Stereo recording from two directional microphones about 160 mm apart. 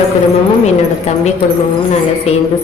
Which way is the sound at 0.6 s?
45° left (ahead or behind).